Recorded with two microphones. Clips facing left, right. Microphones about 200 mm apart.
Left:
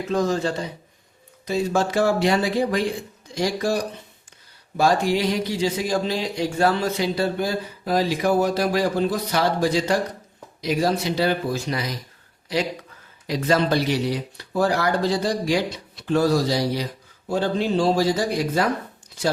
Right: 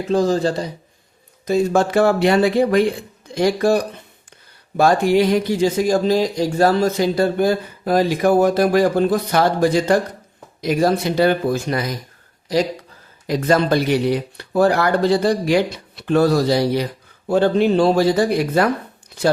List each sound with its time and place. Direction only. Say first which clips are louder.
0.1 s speech: right 5 dB; 35° right (ahead or behind)
1.5 s speech: right 5 dB; 50° right (ahead or behind)
4.8 s speech: right 5 dB; 55° right (ahead or behind)
13.2 s speech: right 4 dB; 50° right (ahead or behind)